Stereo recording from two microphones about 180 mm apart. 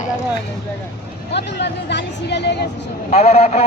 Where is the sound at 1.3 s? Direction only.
70° left (ahead or behind).